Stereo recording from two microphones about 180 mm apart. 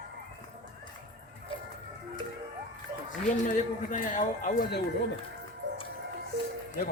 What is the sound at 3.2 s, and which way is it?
Speech, 45° left (ahead or behind).